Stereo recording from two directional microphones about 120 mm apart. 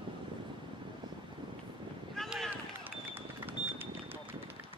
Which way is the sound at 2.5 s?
15° right (ahead or behind).